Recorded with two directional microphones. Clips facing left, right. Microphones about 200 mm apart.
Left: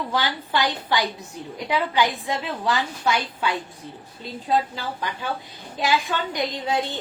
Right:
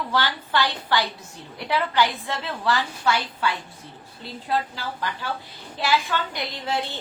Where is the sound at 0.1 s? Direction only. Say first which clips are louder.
Right 1 dB; 15° left (ahead or behind).